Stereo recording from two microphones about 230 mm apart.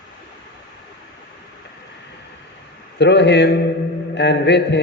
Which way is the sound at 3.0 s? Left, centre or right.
Left.